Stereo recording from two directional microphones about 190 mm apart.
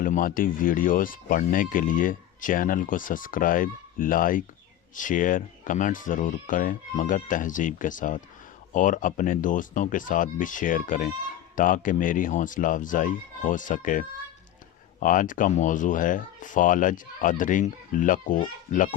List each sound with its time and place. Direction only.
0.0 s speech: 45° left (ahead or behind)
15.0 s speech: 45° left (ahead or behind)